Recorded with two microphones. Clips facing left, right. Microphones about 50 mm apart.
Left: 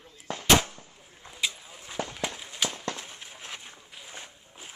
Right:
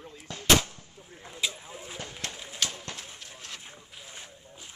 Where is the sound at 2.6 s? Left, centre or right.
Centre.